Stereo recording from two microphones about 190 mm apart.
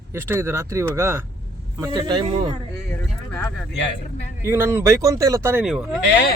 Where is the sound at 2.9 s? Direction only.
10° left (ahead or behind).